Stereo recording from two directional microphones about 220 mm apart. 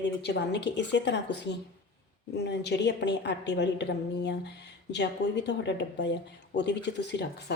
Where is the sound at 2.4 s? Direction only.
50° left (ahead or behind).